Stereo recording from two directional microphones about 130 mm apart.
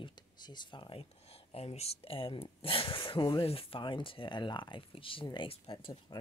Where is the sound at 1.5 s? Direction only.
50° left (ahead or behind).